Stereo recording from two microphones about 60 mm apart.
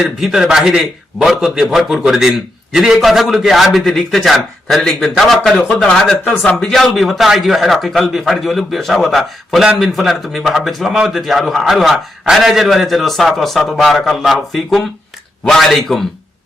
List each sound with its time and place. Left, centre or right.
0.2 s a man's voice: centre